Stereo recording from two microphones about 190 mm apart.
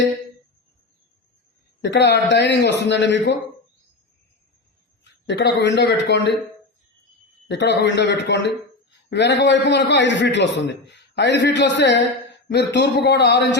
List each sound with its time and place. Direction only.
1.8 s a man's voice: 65° left (ahead or behind)
5.2 s a man's voice: 65° left (ahead or behind)
7.4 s a man's voice: 65° left (ahead or behind)